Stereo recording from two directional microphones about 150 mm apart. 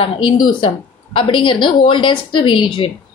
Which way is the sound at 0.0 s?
30° left (ahead or behind).